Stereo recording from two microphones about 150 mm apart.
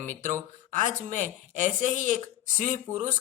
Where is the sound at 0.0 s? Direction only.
55° right (ahead or behind).